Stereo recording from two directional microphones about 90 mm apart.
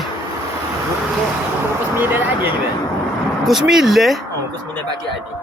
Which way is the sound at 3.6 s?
5° right (ahead or behind).